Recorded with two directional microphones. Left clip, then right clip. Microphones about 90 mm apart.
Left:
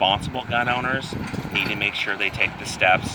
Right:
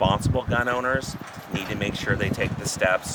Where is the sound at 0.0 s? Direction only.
55° right (ahead or behind).